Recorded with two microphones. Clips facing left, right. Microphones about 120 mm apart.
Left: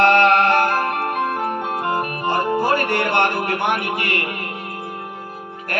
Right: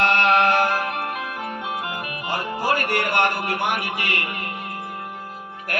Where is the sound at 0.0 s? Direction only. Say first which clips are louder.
Left 4 dB; 45° left (ahead or behind).